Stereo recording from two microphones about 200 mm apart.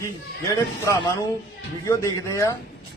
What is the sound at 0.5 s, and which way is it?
A man's voice, 15° left (ahead or behind).